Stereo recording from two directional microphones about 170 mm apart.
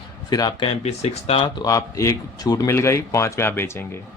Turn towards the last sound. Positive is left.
turn(degrees=15)  # may be behind; listen again after turning